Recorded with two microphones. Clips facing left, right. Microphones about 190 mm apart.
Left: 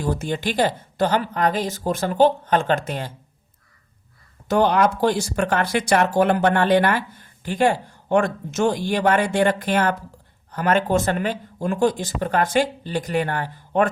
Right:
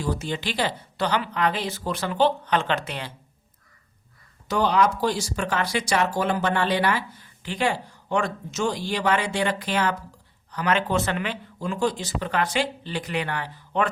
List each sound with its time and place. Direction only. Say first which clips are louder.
0.0 s speech: left 4 dB; 50° left (ahead or behind)
4.4 s speech: left 4 dB; 55° left (ahead or behind)